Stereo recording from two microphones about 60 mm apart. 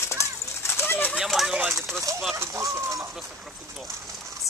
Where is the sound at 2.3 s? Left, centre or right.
Right.